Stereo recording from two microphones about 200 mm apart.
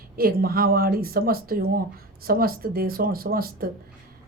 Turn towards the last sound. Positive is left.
turn(degrees=-50)  # may be behind; listen again after turning